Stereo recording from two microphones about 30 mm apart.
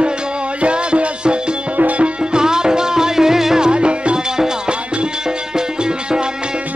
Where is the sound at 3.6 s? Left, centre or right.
Right.